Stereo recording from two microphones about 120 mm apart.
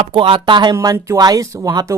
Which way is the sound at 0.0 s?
45° right (ahead or behind).